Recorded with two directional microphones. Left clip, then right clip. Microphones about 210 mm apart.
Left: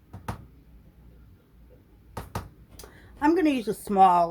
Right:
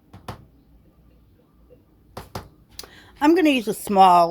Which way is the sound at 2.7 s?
35° right (ahead or behind).